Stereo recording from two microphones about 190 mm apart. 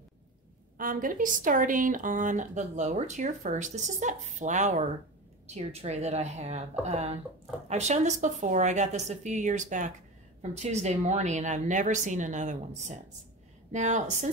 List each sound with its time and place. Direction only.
0.7 s speech: 45° right (ahead or behind)